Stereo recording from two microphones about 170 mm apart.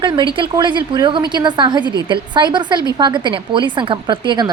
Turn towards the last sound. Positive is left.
turn(degrees=-25)  # may be behind; listen again after turning